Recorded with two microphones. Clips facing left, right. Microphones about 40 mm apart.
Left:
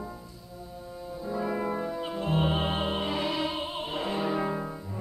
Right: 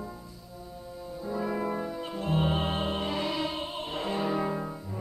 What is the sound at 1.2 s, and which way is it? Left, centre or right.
Music, centre.